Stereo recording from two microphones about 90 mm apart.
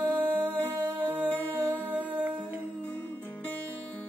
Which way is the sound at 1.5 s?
20° left (ahead or behind).